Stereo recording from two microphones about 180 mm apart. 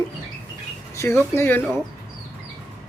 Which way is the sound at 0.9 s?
15° left (ahead or behind).